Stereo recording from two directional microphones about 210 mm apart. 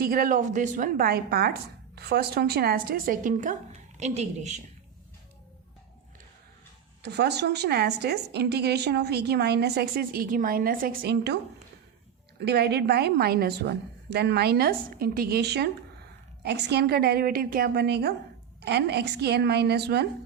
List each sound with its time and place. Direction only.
0.0 s a woman's voice: 45° right (ahead or behind)
7.0 s a woman's voice: 55° right (ahead or behind)
12.4 s a woman's voice: 50° right (ahead or behind)